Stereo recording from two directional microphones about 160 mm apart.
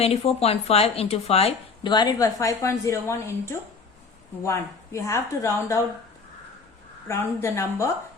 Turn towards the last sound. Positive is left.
turn(degrees=15)  # may be behind; listen again after turning